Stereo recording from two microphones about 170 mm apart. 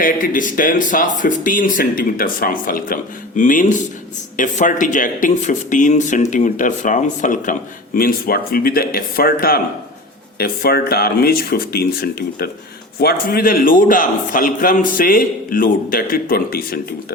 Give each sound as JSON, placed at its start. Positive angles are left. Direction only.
{"t": 0.0, "sound": "a man's voice", "side_deg": 50}